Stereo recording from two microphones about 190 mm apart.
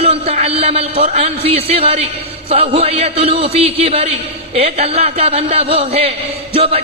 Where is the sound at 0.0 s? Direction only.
30° right (ahead or behind).